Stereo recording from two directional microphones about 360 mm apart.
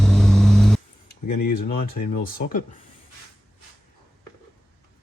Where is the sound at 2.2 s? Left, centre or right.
Left.